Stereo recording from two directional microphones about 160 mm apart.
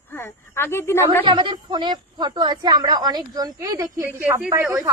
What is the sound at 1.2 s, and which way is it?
A woman's voice, 30° right (ahead or behind).